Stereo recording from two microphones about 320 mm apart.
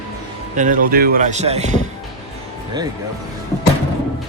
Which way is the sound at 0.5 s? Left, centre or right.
Right.